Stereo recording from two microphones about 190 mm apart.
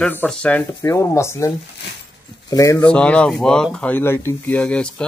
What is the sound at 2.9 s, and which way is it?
Speech, 5° left (ahead or behind).